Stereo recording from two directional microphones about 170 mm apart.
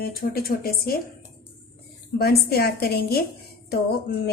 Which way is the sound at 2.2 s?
65° left (ahead or behind).